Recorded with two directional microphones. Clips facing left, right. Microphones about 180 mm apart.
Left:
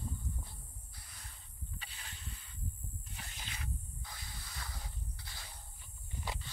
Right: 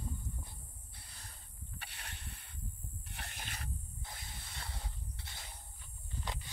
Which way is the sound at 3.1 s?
65° right (ahead or behind).